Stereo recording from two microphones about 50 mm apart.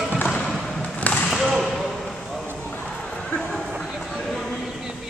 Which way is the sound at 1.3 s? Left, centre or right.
Centre.